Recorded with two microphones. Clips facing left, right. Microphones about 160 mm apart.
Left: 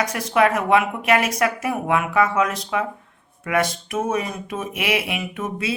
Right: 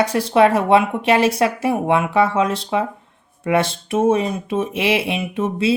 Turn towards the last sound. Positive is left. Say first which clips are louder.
# right 7 dB
turn(degrees=-30)  # may be behind; listen again after turning